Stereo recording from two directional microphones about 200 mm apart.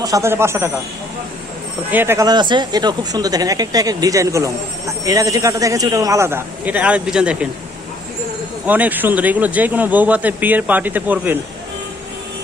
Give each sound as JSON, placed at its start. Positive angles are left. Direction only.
{"t": 0.0, "sound": "speech", "side_deg": -15}
{"t": 1.9, "sound": "speech", "side_deg": -10}
{"t": 8.6, "sound": "speech", "side_deg": -10}